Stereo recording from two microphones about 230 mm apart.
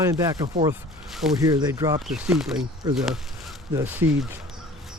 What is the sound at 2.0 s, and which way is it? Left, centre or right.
Speech, centre.